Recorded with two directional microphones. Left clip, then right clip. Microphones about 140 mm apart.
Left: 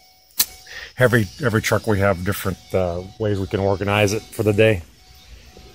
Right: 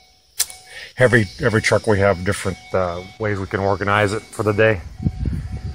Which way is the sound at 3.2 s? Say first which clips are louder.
Even; 40° left (ahead or behind).